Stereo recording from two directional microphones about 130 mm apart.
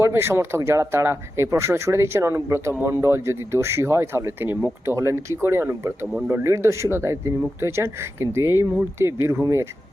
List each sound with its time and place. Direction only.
0.0 s speech: 20° right (ahead or behind)